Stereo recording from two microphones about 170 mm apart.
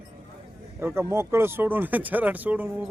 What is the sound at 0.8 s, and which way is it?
Speech, 15° right (ahead or behind).